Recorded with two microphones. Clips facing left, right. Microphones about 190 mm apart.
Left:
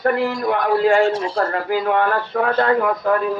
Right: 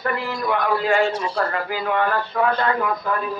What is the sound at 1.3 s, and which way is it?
A man's voice, 45° left (ahead or behind).